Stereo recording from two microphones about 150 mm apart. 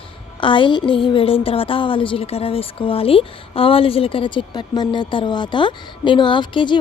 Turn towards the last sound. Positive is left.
turn(degrees=30)  # may be behind; listen again after turning